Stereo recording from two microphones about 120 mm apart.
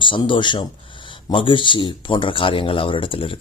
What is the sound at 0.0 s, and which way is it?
Speech, 45° left (ahead or behind).